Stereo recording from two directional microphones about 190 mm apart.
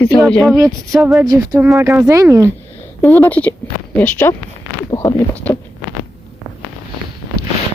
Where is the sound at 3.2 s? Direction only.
10° left (ahead or behind).